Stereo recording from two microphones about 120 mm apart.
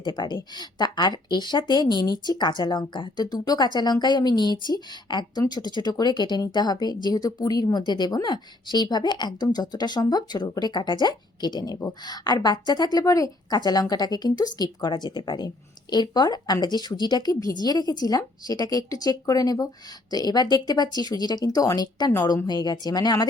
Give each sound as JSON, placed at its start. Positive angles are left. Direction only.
{"t": 0.0, "sound": "speech", "side_deg": 40}